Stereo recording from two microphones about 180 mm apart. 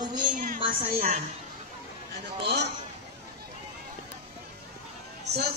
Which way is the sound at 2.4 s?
70° right (ahead or behind).